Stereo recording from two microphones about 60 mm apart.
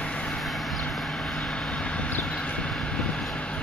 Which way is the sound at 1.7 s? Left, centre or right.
Centre.